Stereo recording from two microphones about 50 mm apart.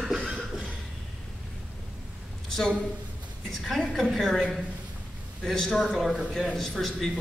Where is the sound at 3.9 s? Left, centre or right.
Centre.